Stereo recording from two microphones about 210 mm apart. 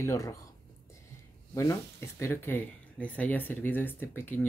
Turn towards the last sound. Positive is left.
turn(degrees=10)  # may be behind; listen again after turning